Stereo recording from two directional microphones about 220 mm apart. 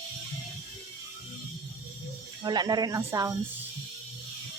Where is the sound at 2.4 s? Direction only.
20° right (ahead or behind).